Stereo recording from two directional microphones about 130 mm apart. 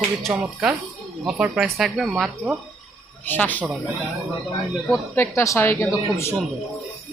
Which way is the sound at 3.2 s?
15° left (ahead or behind).